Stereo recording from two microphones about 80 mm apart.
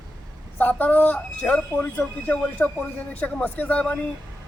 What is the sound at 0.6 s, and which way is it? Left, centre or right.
Speech, left.